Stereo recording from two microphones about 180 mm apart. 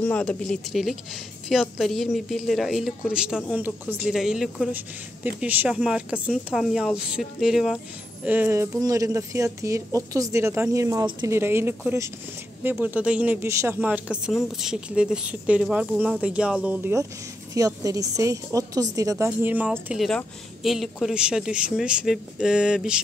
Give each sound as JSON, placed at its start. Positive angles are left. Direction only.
{"t": 0.0, "sound": "a woman's voice", "side_deg": 10}